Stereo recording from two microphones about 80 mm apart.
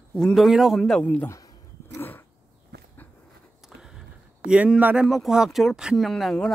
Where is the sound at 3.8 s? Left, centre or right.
Centre.